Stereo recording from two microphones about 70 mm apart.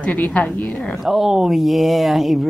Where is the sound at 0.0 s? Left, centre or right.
Centre.